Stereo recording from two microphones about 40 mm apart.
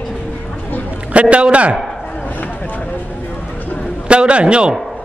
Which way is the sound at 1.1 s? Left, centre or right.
Right.